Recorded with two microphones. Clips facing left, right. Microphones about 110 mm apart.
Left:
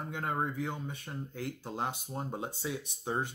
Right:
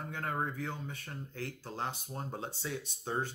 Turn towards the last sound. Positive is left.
turn(degrees=15)  # may be behind; listen again after turning